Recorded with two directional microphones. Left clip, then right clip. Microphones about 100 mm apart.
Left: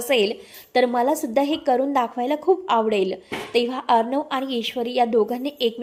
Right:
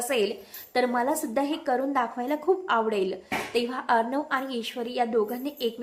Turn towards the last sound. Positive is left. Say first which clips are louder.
# left 6 dB
turn(degrees=40)  # may be behind; listen again after turning